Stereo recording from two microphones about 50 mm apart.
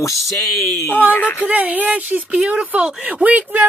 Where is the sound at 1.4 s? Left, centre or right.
Right.